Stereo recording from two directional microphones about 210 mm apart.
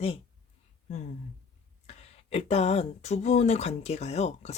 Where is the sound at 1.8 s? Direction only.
30° left (ahead or behind).